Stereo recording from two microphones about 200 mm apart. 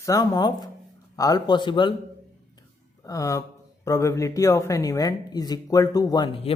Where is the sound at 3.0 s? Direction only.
15° left (ahead or behind).